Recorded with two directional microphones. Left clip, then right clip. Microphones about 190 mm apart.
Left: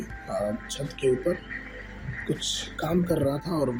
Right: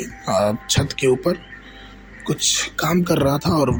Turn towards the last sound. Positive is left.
turn(degrees=-50)  # may be behind; listen again after turning